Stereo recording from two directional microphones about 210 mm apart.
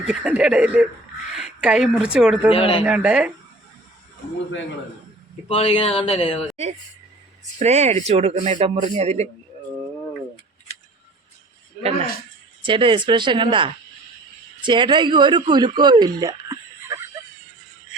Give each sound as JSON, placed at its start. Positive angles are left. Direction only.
{"t": 0.1, "sound": "speech", "side_deg": -5}
{"t": 1.3, "sound": "a sound", "side_deg": 0}
{"t": 2.1, "sound": "speech", "side_deg": -5}
{"t": 2.5, "sound": "speech", "side_deg": 25}
{"t": 2.8, "sound": "speech", "side_deg": -5}
{"t": 5.5, "sound": "speech", "side_deg": 25}
{"t": 7.6, "sound": "speech", "side_deg": -30}
{"t": 12.6, "sound": "speech", "side_deg": -25}